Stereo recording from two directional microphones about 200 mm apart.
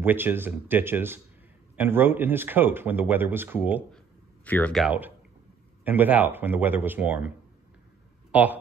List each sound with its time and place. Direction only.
0.0 s speech: 10° right (ahead or behind)
4.5 s speech: 5° left (ahead or behind)
4.8 s speech: 10° right (ahead or behind)